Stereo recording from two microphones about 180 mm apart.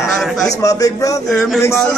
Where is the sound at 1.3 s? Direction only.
5° left (ahead or behind).